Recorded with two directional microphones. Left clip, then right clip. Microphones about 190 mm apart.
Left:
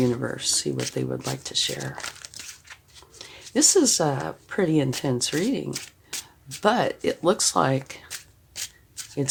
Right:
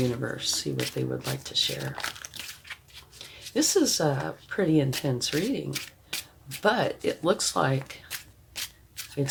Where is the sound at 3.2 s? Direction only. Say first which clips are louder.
Left 3 dB; 50° left (ahead or behind).